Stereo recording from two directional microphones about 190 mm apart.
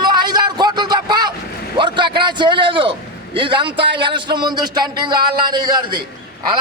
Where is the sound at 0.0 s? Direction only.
20° right (ahead or behind).